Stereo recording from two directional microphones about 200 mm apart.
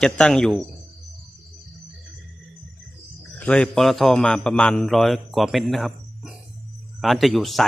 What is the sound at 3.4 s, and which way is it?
Speech, 5° left (ahead or behind).